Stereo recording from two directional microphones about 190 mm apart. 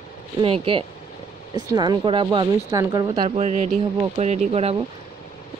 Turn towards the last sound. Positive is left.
turn(degrees=-30)  # may be behind; listen again after turning